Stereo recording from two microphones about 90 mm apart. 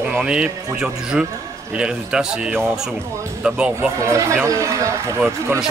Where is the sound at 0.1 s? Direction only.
10° right (ahead or behind).